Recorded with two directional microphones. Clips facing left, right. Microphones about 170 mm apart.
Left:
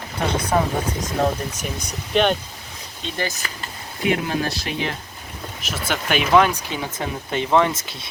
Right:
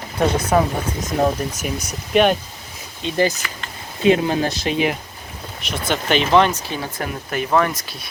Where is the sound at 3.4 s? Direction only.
35° left (ahead or behind).